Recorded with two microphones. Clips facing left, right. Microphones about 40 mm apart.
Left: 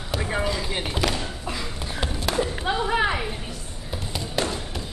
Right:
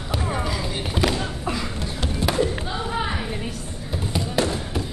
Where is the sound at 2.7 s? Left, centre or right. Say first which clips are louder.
Left 4 dB; left.